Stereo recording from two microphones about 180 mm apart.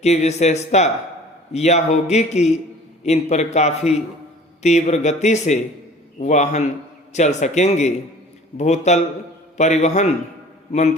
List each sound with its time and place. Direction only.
0.0 s a man's voice: 40° left (ahead or behind)